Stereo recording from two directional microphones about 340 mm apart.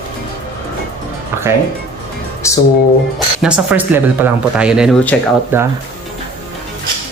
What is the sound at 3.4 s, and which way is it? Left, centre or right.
Speech, centre.